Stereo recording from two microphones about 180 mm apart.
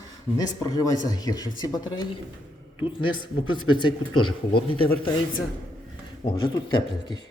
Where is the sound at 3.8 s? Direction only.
25° left (ahead or behind).